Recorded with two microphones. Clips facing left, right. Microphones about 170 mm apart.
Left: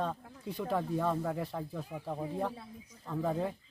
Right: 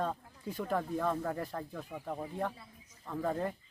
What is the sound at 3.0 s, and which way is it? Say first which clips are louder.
Speech: left 1 dB; centre (ahead or behind).